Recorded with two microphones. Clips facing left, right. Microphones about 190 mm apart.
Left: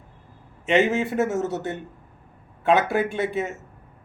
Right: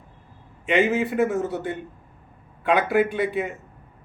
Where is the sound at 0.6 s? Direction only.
25° left (ahead or behind).